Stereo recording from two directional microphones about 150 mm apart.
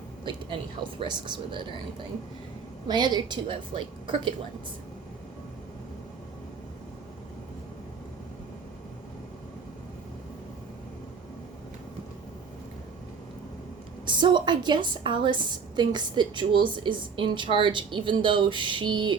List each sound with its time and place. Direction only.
0.9 s a woman's voice: 30° right (ahead or behind)
2.8 s a woman's voice: 30° right (ahead or behind)
14.0 s a woman's voice: 30° right (ahead or behind)